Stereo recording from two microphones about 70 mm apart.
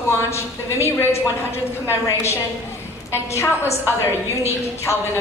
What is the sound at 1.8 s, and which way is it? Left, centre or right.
A woman's voice, left.